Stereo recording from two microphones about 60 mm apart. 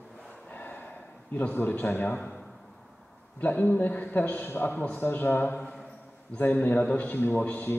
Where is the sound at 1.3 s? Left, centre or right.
Left.